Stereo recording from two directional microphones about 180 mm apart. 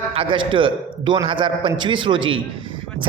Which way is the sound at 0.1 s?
30° right (ahead or behind).